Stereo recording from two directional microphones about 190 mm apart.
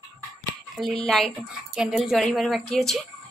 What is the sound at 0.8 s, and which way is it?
A woman's voice, centre (ahead or behind).